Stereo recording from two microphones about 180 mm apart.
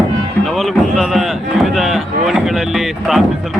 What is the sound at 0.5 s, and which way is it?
A man's voice, centre (ahead or behind).